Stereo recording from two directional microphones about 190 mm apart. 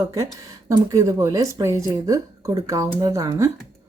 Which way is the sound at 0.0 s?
15° right (ahead or behind).